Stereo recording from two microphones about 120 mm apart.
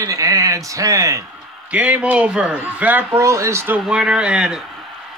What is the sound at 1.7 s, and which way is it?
Speech, 10° right (ahead or behind).